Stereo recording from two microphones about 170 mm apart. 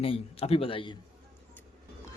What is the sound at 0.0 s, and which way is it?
Speech, 35° left (ahead or behind).